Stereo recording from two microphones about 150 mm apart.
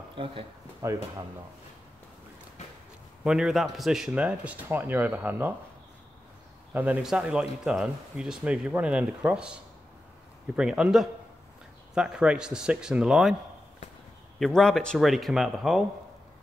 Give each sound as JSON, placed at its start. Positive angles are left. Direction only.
{"t": 0.1, "sound": "speech", "side_deg": -35}
{"t": 0.8, "sound": "speech", "side_deg": -20}
{"t": 3.3, "sound": "speech", "side_deg": -5}
{"t": 6.7, "sound": "a man's voice", "side_deg": -10}
{"t": 14.4, "sound": "a man's voice", "side_deg": 5}